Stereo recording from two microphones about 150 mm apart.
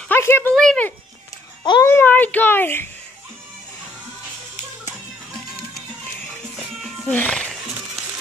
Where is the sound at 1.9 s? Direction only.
15° left (ahead or behind).